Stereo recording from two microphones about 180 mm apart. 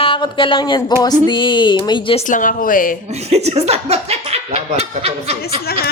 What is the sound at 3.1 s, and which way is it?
Speech, 35° right (ahead or behind).